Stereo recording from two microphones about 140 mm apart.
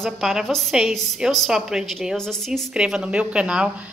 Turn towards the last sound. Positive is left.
turn(degrees=-5)  # may be behind; listen again after turning